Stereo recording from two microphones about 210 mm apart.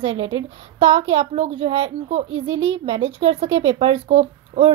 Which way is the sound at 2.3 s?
65° right (ahead or behind).